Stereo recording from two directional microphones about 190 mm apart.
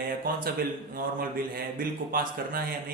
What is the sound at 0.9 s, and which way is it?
A man's voice, 50° right (ahead or behind).